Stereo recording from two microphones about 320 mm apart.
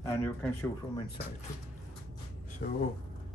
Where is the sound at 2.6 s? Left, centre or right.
Left.